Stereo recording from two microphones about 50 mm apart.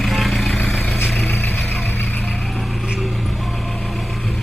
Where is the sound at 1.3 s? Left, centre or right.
Left.